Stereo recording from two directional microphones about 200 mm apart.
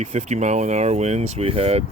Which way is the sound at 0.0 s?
35° right (ahead or behind).